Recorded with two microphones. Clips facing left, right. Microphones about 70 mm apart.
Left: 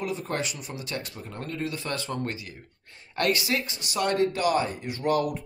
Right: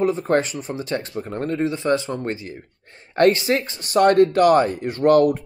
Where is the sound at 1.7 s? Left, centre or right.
Right.